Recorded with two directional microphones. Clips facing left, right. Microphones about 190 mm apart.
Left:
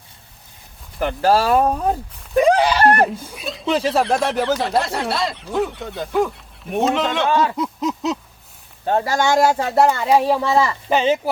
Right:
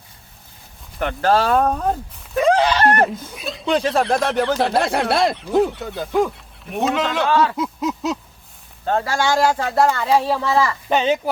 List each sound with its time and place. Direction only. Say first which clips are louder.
0.9 s speech: left 1 dB; 5° left (ahead or behind)
4.9 s speech: right 4 dB; 60° right (ahead or behind)
5.3 s speech: right 4 dB; centre (ahead or behind)
7.3 s speech: right 1 dB; 15° left (ahead or behind)
7.5 s a sound: even; centre (ahead or behind)
8.9 s speech: left 2 dB; 20° left (ahead or behind)
10.4 s speech: left 1 dB; 25° left (ahead or behind)
10.8 s speech: left 1 dB; 5° left (ahead or behind)